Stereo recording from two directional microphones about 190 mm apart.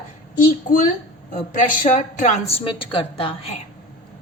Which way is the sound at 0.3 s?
45° left (ahead or behind).